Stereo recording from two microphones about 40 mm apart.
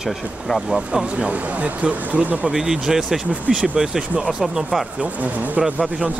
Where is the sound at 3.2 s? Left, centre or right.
Right.